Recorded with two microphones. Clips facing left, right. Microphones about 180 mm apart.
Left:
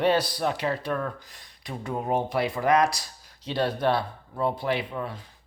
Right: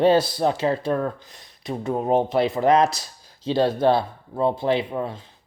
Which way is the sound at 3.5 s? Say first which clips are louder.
Right 6 dB; 25° right (ahead or behind).